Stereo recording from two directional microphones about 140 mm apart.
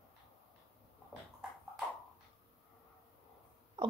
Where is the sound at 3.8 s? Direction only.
30° right (ahead or behind).